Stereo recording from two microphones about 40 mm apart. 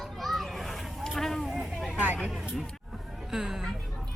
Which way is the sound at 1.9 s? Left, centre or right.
Right.